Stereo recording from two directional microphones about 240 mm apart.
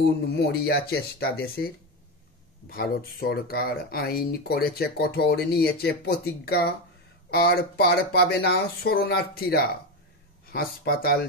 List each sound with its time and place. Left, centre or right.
0.0 s speech: left
2.7 s speech: left